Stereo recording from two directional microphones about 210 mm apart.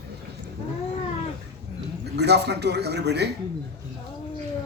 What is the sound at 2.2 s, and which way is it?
A woman's voice, 50° right (ahead or behind).